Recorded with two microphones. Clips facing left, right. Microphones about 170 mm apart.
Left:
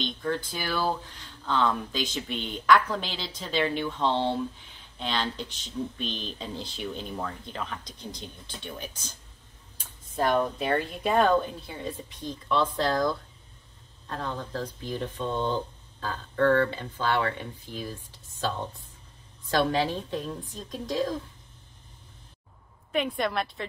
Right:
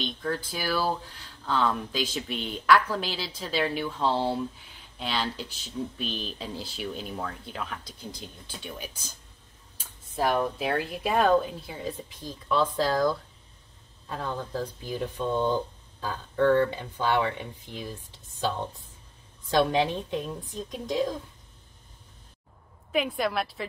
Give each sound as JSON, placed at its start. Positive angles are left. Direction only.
{"t": 0.0, "sound": "speech", "side_deg": -5}
{"t": 10.1, "sound": "speech", "side_deg": -5}
{"t": 19.5, "sound": "a woman's voice", "side_deg": -20}
{"t": 22.8, "sound": "speech", "side_deg": 0}